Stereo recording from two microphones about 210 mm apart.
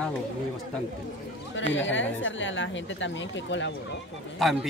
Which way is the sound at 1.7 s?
60° left (ahead or behind).